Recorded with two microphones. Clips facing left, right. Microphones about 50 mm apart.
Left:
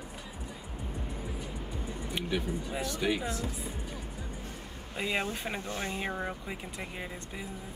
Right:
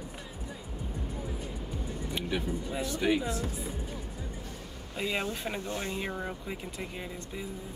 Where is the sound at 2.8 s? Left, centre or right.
Right.